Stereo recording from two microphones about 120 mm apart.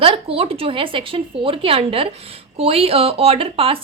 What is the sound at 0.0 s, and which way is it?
A woman's voice, 50° right (ahead or behind).